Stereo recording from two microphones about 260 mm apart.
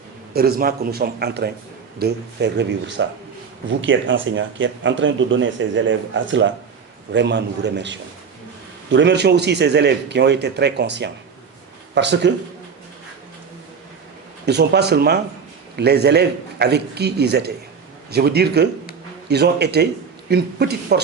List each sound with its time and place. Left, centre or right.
0.3 s a man's voice: right
14.4 s a man's voice: right